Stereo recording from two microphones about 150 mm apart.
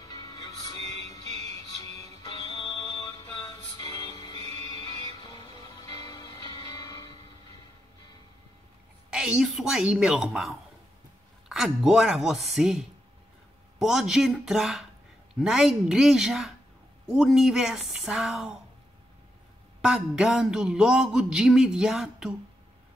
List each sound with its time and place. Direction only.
0.1 s music: 25° left (ahead or behind)
0.7 s music: 45° right (ahead or behind)
3.1 s music: 25° left (ahead or behind)
4.4 s music: 45° right (ahead or behind)
4.8 s music: 25° left (ahead or behind)
9.1 s a sound: 5° right (ahead or behind)
19.8 s a sound: 5° right (ahead or behind)